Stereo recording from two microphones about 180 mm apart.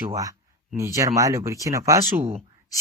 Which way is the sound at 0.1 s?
20° right (ahead or behind).